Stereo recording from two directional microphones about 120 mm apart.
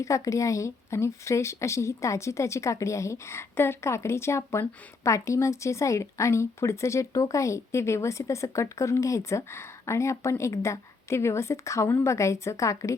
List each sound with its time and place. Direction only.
0.0 s speech: 25° left (ahead or behind)